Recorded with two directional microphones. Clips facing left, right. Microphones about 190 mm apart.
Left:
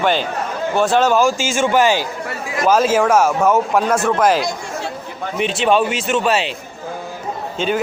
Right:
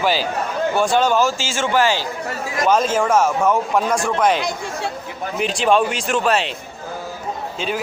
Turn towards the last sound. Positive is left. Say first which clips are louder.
# left 5 dB
turn(degrees=0)  # may be behind; listen again after turning